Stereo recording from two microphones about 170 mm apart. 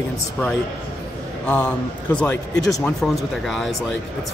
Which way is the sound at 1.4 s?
5° left (ahead or behind).